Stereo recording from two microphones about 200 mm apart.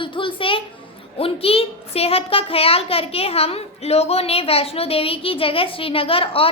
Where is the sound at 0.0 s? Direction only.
25° left (ahead or behind).